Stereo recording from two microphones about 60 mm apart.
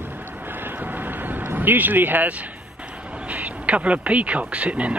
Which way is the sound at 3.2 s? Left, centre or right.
Right.